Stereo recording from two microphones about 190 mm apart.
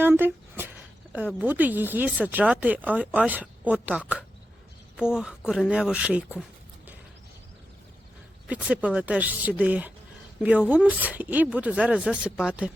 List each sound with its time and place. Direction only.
0.0 s a sound: 10° right (ahead or behind)
1.4 s speech: 10° right (ahead or behind)
8.4 s speech: 5° right (ahead or behind)